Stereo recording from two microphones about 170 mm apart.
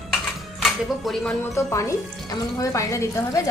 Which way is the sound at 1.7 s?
15° left (ahead or behind).